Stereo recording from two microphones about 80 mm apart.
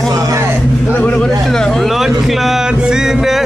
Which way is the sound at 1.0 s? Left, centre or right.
Centre.